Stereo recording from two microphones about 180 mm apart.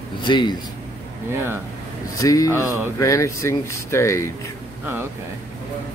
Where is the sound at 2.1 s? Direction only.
20° left (ahead or behind).